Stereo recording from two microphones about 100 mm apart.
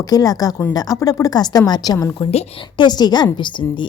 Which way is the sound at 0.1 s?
40° left (ahead or behind).